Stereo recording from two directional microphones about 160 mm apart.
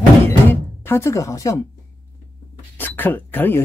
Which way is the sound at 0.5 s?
15° left (ahead or behind).